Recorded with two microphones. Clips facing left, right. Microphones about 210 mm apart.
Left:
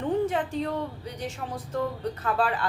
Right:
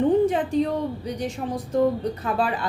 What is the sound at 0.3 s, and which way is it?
Speech, 15° right (ahead or behind).